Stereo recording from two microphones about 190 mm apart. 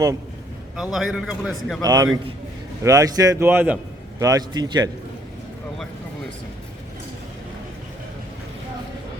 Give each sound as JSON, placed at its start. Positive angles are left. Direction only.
{"t": 0.8, "sound": "a man's voice", "side_deg": 0}
{"t": 1.8, "sound": "a man's voice", "side_deg": -20}